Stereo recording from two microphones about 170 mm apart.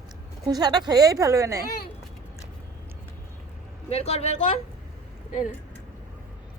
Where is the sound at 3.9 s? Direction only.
35° left (ahead or behind).